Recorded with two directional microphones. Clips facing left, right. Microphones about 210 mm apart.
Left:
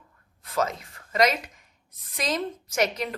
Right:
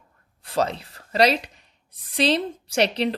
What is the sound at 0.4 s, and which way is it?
A woman's voice, 30° right (ahead or behind).